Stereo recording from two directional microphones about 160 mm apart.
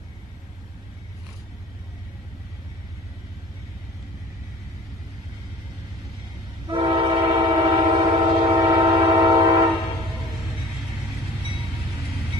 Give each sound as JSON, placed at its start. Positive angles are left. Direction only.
{"t": 6.7, "sound": "train", "side_deg": -25}